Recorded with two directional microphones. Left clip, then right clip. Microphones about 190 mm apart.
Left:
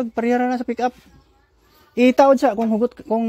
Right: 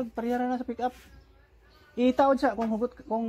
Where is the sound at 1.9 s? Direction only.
45° left (ahead or behind).